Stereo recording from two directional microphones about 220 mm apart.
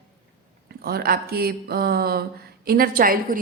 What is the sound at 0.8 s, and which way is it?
A woman's voice, 45° right (ahead or behind).